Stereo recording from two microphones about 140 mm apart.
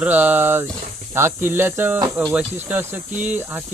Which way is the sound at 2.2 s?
Centre (ahead or behind).